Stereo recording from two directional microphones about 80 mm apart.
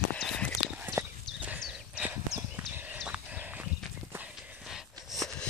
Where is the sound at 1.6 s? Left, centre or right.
Centre.